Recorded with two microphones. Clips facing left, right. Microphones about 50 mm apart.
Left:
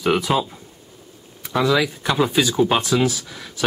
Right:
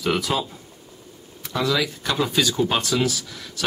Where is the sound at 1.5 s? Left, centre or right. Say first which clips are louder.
Left 4 dB; centre.